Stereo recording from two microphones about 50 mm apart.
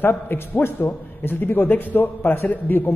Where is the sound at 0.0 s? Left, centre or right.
Left.